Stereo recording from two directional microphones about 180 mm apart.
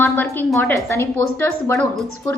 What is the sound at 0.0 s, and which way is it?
A woman's voice, 10° left (ahead or behind).